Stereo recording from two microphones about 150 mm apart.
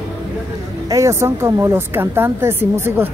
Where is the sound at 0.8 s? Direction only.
20° right (ahead or behind).